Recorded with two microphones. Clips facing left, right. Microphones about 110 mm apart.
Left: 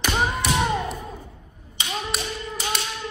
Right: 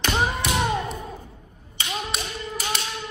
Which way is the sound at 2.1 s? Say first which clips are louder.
Left 1 dB; centre (ahead or behind).